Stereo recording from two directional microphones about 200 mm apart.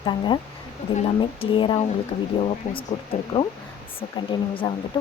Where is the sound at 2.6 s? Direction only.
35° left (ahead or behind).